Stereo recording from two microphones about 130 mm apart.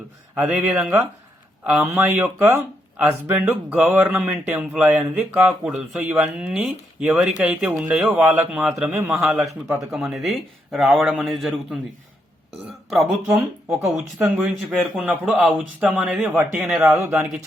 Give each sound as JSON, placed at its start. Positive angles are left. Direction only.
{"t": 0.3, "sound": "speech", "side_deg": -10}
{"t": 1.9, "sound": "speech", "side_deg": -15}
{"t": 12.6, "sound": "burping", "side_deg": 0}
{"t": 13.7, "sound": "speech", "side_deg": -10}